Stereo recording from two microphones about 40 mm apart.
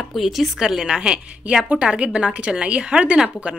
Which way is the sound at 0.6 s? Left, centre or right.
Centre.